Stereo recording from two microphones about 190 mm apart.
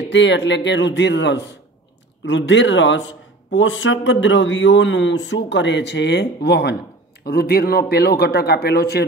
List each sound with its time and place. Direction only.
0.1 s a man's voice: 70° left (ahead or behind)